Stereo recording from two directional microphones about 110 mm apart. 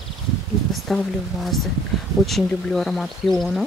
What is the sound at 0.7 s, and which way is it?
Speech, centre (ahead or behind).